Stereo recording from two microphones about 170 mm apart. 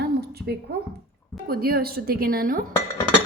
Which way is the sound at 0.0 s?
70° right (ahead or behind).